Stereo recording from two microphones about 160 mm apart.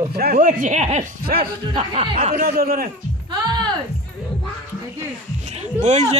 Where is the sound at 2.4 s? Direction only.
65° right (ahead or behind).